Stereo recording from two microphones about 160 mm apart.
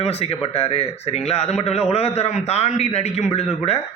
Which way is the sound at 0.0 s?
40° left (ahead or behind).